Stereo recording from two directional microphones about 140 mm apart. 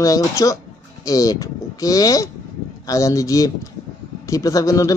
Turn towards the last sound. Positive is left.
turn(degrees=25)  # may be behind; listen again after turning